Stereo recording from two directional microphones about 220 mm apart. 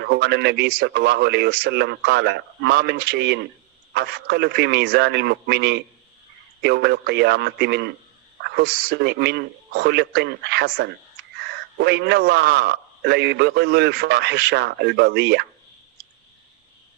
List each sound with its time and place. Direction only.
0.0 s a man's voice: 50° right (ahead or behind)